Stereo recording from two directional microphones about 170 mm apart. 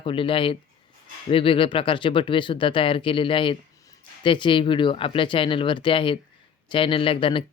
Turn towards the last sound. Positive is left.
turn(degrees=30)  # may be behind; listen again after turning